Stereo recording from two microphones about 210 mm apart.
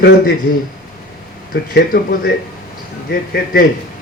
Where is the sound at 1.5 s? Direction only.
50° left (ahead or behind).